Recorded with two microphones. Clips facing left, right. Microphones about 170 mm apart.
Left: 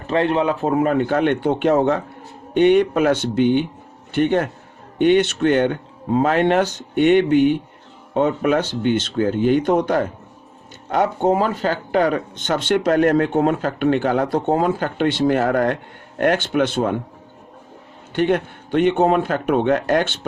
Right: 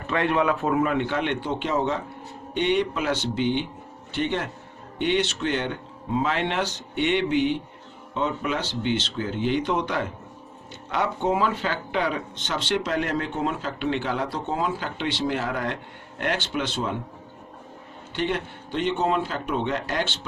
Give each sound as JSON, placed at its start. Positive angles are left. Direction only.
{"t": 0.1, "sound": "speech", "side_deg": 30}
{"t": 18.1, "sound": "a man's voice", "side_deg": 50}